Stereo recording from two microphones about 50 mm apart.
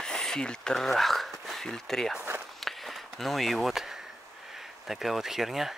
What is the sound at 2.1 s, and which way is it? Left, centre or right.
Walk, right.